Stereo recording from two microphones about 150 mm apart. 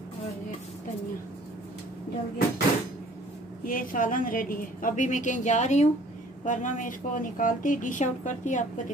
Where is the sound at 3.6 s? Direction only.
65° left (ahead or behind).